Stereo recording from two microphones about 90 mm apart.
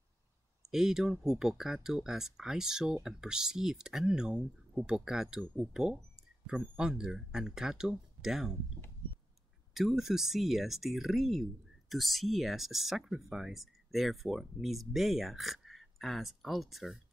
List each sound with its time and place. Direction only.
0.7 s speech: 5° right (ahead or behind)
9.8 s speech: 5° right (ahead or behind)